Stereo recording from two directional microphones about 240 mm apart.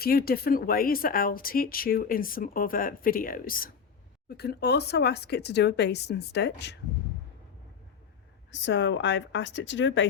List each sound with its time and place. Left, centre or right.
0.0 s speech: left
8.4 s speech: left